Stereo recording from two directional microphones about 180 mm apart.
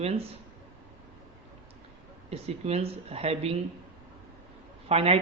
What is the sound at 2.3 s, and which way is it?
A man's voice, 35° right (ahead or behind).